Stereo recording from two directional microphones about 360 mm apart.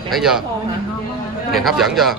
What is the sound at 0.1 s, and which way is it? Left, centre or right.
Speech, centre.